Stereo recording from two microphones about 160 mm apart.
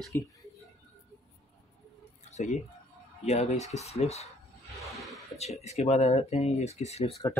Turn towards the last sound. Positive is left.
turn(degrees=40)  # may be behind; listen again after turning